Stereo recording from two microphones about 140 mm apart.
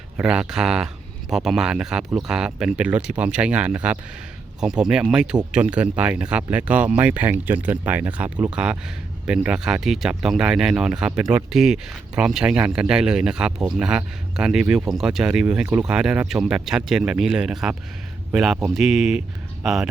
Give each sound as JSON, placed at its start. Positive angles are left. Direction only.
{"t": 0.2, "sound": "speech", "side_deg": -5}